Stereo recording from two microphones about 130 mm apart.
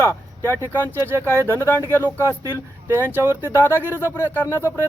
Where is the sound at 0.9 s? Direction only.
20° right (ahead or behind).